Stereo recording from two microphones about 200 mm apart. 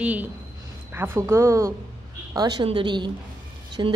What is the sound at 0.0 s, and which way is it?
A woman's voice, 10° right (ahead or behind).